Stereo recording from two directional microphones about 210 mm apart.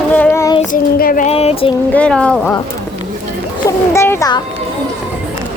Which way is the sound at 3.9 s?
10° left (ahead or behind).